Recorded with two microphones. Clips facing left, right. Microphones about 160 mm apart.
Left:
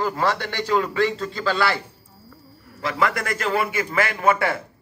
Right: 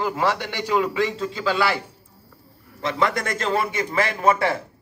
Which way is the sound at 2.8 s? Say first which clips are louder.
Even; 25° right (ahead or behind).